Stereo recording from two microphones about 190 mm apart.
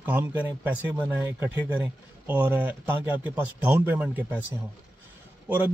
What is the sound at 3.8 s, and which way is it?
Speech, 10° right (ahead or behind).